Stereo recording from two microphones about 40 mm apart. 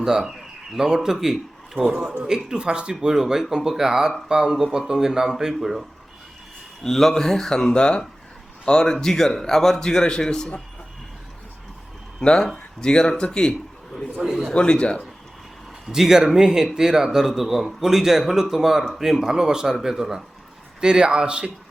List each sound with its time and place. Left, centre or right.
0.0 s speech: centre
1.8 s speech: right
6.8 s a man's voice: centre
7.7 s a man's voice: left
12.2 s speech: left
14.2 s speech: centre
14.5 s speech: left
15.9 s a man's voice: centre
20.8 s speech: right